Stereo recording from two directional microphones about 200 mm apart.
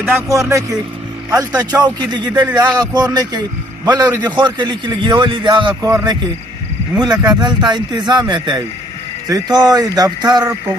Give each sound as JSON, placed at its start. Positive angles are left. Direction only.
{"t": 0.2, "sound": "a man's voice", "side_deg": -15}